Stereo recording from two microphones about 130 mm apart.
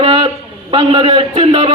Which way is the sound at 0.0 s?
40° right (ahead or behind).